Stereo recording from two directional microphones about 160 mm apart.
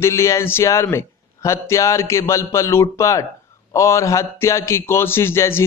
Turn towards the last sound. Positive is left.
turn(degrees=15)  # may be behind; listen again after turning